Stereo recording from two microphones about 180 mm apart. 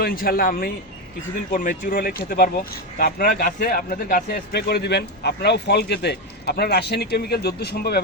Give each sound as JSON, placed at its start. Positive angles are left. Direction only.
{"t": 0.0, "sound": "speech", "side_deg": 55}